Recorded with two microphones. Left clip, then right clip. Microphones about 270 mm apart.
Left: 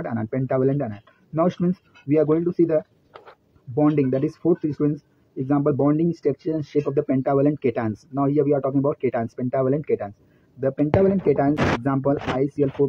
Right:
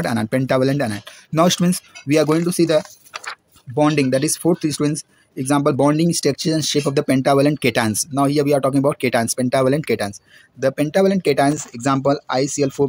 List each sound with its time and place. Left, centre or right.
0.0 s speech: right